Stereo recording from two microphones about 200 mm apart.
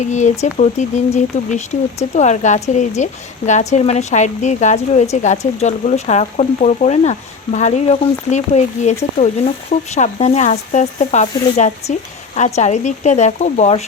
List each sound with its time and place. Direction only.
0.0 s speech: 35° left (ahead or behind)